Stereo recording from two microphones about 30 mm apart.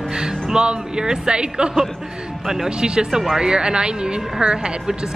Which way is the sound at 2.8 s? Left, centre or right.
Right.